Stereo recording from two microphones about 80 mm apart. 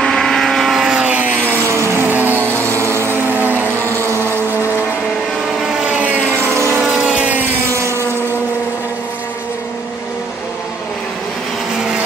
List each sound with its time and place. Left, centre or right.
0.0 s vehicle: centre
1.8 s music: right
2.8 s vehicle: right
5.8 s vehicle: centre
7.7 s vehicle: right